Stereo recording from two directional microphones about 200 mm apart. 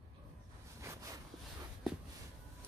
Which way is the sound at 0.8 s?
15° right (ahead or behind).